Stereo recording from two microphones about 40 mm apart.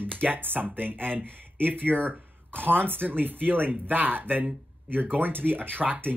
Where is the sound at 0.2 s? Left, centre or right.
Right.